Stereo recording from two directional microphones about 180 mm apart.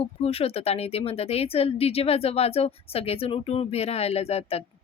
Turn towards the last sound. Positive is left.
turn(degrees=35)  # may be behind; listen again after turning